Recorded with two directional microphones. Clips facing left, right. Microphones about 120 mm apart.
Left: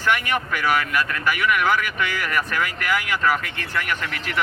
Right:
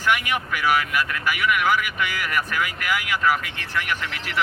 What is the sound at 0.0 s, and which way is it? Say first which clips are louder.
Speech: left 1 dB; 10° right (ahead or behind).